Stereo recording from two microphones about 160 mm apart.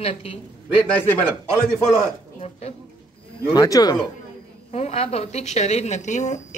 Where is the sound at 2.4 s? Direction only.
40° left (ahead or behind).